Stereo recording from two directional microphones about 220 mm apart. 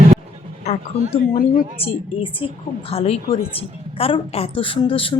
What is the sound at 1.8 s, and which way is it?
A woman's voice, 25° left (ahead or behind).